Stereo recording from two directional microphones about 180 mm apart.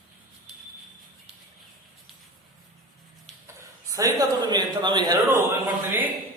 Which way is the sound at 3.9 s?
20° right (ahead or behind).